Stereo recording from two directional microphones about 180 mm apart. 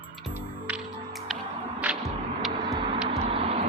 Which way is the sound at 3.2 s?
30° right (ahead or behind).